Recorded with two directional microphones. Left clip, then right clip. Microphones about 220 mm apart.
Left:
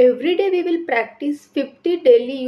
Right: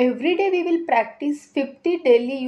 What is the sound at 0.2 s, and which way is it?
A woman's voice, 15° right (ahead or behind).